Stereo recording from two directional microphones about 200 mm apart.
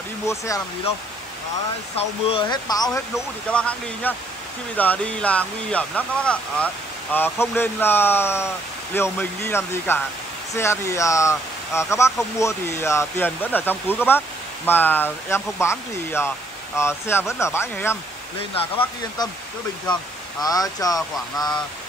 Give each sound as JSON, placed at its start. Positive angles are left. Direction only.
{"t": 2.0, "sound": "speech", "side_deg": 30}
{"t": 20.4, "sound": "speech", "side_deg": 20}